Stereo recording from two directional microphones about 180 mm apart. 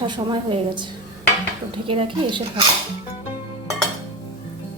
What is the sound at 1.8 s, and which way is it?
Speech, 30° right (ahead or behind).